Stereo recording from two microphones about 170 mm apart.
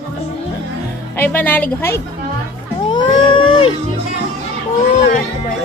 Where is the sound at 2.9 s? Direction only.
25° left (ahead or behind).